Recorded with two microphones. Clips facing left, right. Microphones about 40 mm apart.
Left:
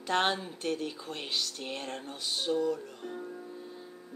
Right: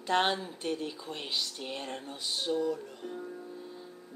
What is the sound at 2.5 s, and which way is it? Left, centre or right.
Music, centre.